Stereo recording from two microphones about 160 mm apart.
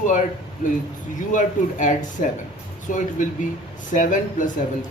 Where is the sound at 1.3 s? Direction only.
50° left (ahead or behind).